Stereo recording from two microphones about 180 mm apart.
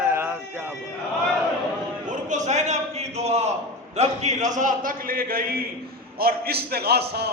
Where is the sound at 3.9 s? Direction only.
35° right (ahead or behind); by 7.3 s 65° right (ahead or behind).